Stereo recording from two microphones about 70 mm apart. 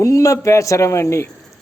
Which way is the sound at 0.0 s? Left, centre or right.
Left.